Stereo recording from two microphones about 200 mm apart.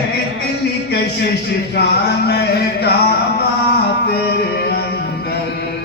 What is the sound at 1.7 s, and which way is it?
Speech, 55° left (ahead or behind).